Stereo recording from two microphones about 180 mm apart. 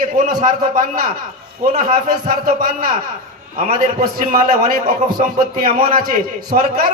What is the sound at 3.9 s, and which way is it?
A man's voice, 50° right (ahead or behind).